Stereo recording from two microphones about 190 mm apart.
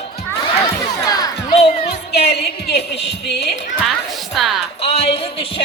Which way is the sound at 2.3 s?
60° left (ahead or behind).